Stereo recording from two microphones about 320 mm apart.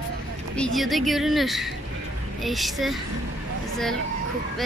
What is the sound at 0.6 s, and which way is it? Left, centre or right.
Speech, centre.